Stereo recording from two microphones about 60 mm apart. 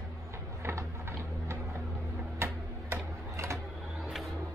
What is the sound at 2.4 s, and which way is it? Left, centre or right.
Tick-tock, right.